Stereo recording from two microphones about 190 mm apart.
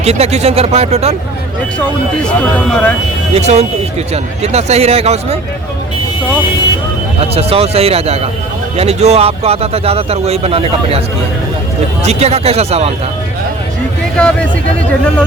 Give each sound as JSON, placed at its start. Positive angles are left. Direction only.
{"t": 0.0, "sound": "speech", "side_deg": -35}
{"t": 2.2, "sound": "speech", "side_deg": 5}
{"t": 3.3, "sound": "speech", "side_deg": -35}
{"t": 7.2, "sound": "speech", "side_deg": -30}
{"t": 12.0, "sound": "speech", "side_deg": -35}
{"t": 14.2, "sound": "speech", "side_deg": 5}